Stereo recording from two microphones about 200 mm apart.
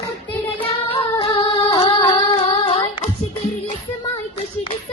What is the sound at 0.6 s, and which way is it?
Singing, 30° left (ahead or behind).